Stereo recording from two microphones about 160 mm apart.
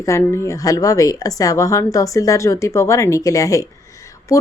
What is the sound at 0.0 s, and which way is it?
Speech, 20° left (ahead or behind).